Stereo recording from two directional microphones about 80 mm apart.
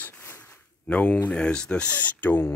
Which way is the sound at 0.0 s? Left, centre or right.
Left.